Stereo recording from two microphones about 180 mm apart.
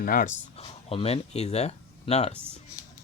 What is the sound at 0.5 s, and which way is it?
Speech, 35° left (ahead or behind).